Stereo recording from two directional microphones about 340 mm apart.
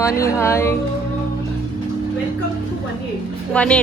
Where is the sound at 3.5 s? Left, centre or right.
Centre.